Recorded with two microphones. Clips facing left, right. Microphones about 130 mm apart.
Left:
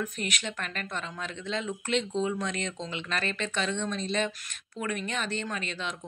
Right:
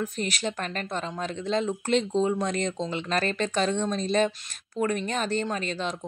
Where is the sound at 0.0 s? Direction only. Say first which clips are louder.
Right 4 dB; 35° right (ahead or behind).